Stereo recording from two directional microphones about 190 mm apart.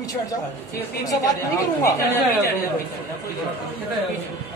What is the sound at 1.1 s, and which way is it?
A woman's voice, 20° left (ahead or behind).